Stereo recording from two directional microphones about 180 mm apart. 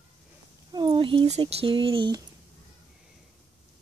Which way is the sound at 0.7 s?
25° right (ahead or behind).